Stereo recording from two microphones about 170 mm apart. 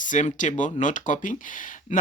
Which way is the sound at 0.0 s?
45° left (ahead or behind).